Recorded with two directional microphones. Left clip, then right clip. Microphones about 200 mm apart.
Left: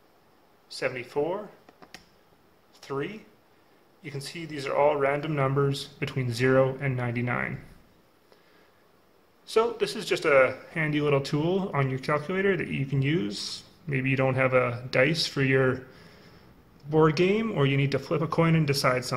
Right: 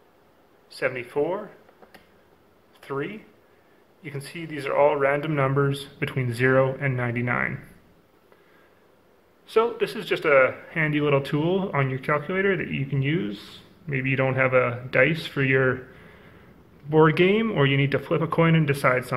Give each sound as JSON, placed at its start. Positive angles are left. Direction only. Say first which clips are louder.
{"t": 0.7, "sound": "speech", "louder": "right 4 dB", "side_deg": 15}
{"t": 2.8, "sound": "speech", "louder": "right 2 dB", "side_deg": 15}
{"t": 9.5, "sound": "speech", "louder": "right 3 dB", "side_deg": 20}
{"t": 16.9, "sound": "speech", "louder": "right 4 dB", "side_deg": 15}